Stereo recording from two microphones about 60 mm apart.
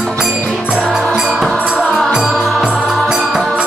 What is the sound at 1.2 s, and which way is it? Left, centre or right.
Music, centre.